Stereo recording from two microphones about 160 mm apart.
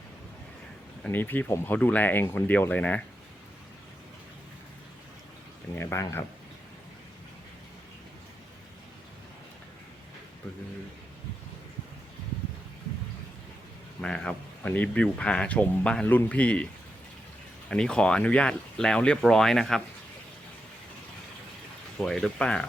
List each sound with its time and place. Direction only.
1.0 s speech: 10° left (ahead or behind)
5.7 s speech: 15° left (ahead or behind)
14.0 s speech: 5° left (ahead or behind)
17.7 s speech: 5° left (ahead or behind)
22.0 s speech: 5° left (ahead or behind)